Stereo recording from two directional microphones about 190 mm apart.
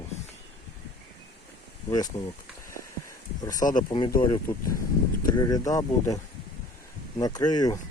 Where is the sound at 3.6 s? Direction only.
45° left (ahead or behind).